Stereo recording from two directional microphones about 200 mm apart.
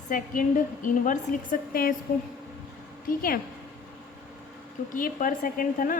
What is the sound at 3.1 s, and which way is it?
Speech, 45° left (ahead or behind).